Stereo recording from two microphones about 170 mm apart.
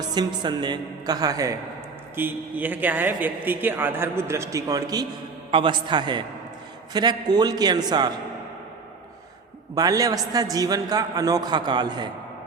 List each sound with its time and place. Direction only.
0.1 s a man's voice: 25° right (ahead or behind)
9.7 s a man's voice: 20° right (ahead or behind)